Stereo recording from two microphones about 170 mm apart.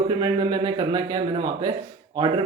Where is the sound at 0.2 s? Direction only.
25° right (ahead or behind).